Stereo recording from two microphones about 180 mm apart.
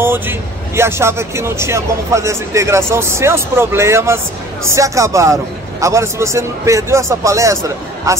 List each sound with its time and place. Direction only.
0.0 s speech: 10° right (ahead or behind)